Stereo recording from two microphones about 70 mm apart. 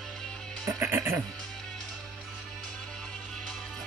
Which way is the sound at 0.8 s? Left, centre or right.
Right.